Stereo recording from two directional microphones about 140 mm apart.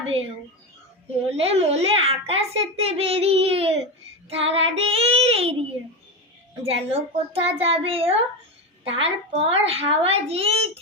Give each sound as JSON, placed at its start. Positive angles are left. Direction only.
{"t": 1.3, "sound": "a child's voice", "side_deg": -45}
{"t": 6.7, "sound": "a child's voice", "side_deg": -45}